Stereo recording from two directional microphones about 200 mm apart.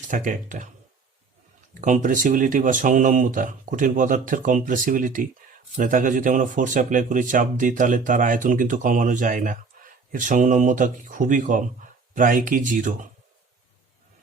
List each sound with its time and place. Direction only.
0.1 s speech: 40° right (ahead or behind)
1.8 s speech: 40° right (ahead or behind)